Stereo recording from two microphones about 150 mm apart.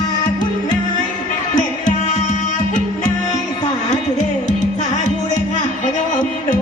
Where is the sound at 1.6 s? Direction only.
55° left (ahead or behind).